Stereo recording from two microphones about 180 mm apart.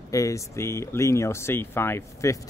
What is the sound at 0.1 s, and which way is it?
Speech, 15° left (ahead or behind).